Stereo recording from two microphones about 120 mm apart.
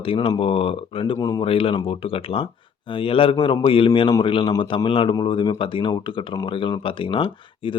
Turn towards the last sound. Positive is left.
turn(degrees=45)  # may be behind; listen again after turning